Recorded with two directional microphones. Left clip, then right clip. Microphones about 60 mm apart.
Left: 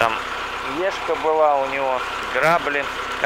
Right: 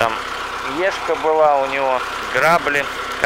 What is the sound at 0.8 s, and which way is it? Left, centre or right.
Speech, right.